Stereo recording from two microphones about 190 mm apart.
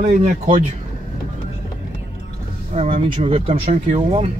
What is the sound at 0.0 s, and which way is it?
Speech, 40° right (ahead or behind).